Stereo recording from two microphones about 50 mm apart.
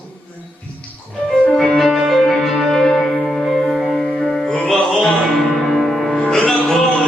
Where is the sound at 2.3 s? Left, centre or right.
Centre.